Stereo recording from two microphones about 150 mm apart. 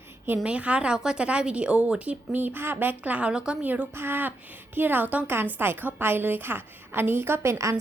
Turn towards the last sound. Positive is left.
turn(degrees=-20)  # may be behind; listen again after turning